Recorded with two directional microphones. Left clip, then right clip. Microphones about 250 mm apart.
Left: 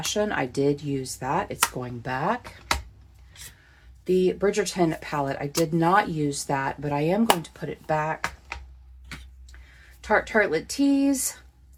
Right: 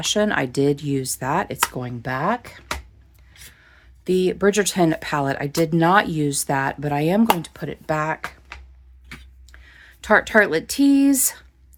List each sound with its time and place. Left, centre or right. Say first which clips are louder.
0.0 s speech: right 5 dB; right
4.0 s speech: right 3 dB; right
10.0 s speech: right 6 dB; right